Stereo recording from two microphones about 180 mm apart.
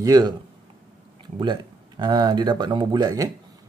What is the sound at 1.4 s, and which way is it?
A man's voice, 25° right (ahead or behind).